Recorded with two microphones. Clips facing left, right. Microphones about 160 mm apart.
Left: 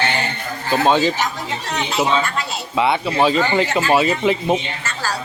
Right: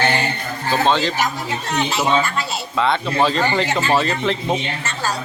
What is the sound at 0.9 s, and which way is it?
Speech, 10° left (ahead or behind).